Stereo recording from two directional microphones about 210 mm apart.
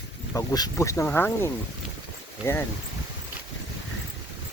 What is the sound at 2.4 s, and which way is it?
Speech, 5° right (ahead or behind).